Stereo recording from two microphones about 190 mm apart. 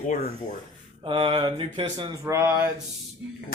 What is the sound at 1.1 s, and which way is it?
Speech, 25° right (ahead or behind).